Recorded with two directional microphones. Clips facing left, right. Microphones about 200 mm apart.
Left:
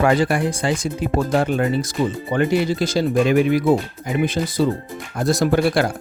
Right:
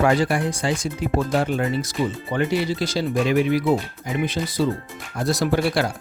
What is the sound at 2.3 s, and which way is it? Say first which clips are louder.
Speech: left 5 dB; 50° left (ahead or behind).